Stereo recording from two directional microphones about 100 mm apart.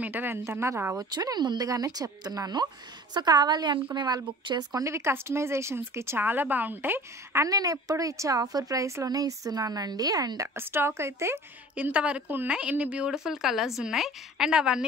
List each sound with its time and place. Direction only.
0.0 s a woman's voice: 20° right (ahead or behind)
0.9 s a woman's voice: 40° right (ahead or behind); by 7.4 s 20° right (ahead or behind)
7.4 s a woman's voice: 35° right (ahead or behind)
11.7 s a woman's voice: 15° right (ahead or behind)